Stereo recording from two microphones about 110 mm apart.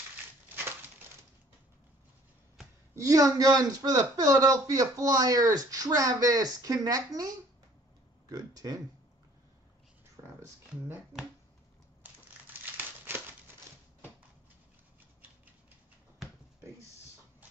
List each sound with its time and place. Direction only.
2.9 s a man's voice: 30° right (ahead or behind)
10.2 s a sound: 30° right (ahead or behind)
10.7 s speech: 10° right (ahead or behind)
12.7 s crumpling: 20° right (ahead or behind)